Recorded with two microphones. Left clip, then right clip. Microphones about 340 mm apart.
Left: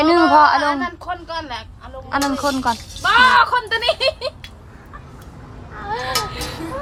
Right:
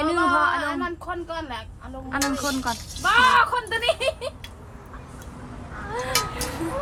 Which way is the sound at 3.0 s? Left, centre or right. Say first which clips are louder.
Left 5 dB; left.